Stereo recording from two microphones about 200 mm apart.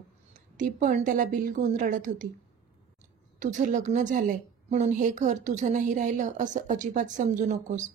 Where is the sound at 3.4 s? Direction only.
40° right (ahead or behind).